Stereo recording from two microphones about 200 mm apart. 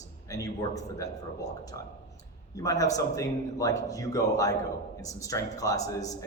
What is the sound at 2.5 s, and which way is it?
A man's voice, 15° left (ahead or behind).